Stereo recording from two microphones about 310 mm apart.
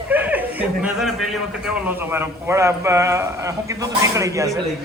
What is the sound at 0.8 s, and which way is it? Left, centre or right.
A man's voice, centre.